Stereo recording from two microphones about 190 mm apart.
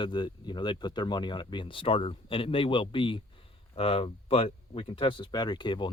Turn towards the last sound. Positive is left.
turn(degrees=25)  # may be behind; listen again after turning